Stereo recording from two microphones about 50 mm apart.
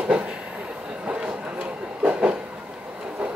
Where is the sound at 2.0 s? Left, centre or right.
Right.